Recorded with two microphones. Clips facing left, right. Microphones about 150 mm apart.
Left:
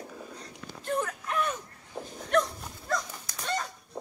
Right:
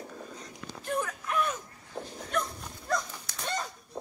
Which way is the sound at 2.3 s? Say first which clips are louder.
Left 7 dB; 75° left (ahead or behind).